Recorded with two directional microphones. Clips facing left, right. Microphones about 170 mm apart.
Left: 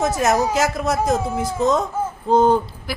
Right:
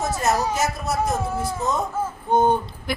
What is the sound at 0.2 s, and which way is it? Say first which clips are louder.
A woman's voice: left 3 dB; 90° left.